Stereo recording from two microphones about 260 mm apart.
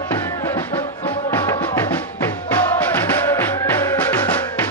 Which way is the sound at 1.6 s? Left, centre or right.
Centre.